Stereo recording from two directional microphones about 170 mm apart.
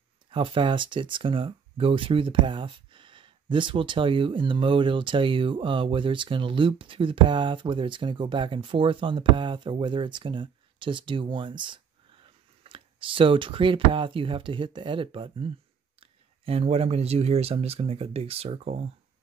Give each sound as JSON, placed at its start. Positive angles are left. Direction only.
{"t": 0.3, "sound": "speech", "side_deg": -30}